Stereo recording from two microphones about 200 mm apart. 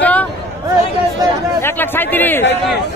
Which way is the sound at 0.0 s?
5° left (ahead or behind).